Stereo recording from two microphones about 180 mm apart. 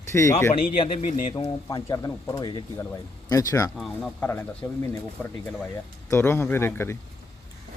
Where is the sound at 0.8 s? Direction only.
30° left (ahead or behind).